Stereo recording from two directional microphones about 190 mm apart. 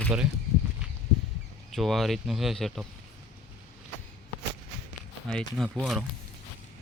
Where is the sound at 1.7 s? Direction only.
Centre (ahead or behind).